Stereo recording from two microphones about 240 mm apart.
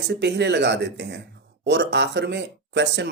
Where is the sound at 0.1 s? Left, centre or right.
Right.